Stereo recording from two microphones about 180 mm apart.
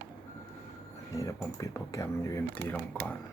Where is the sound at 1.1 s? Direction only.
15° left (ahead or behind).